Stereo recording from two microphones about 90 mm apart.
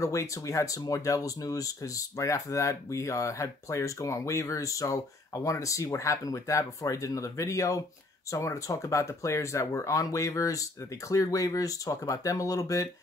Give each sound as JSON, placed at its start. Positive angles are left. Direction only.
{"t": 0.0, "sound": "speech", "side_deg": 35}